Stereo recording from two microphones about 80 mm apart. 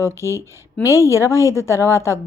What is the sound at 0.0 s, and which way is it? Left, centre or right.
Speech, left.